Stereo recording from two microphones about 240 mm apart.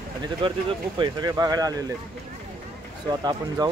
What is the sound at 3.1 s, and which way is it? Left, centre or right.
Speech, centre.